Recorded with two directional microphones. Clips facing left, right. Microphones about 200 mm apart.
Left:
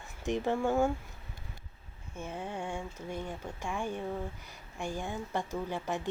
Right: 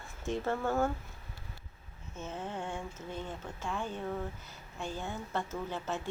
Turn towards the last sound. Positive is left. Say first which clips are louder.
# left 2 dB
turn(degrees=15)  # may be behind; listen again after turning